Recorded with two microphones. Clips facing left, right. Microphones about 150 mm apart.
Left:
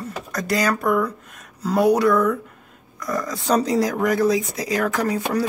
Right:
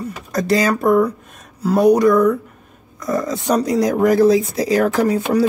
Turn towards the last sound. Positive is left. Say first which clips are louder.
# right 6 dB
turn(degrees=-30)  # may be behind; listen again after turning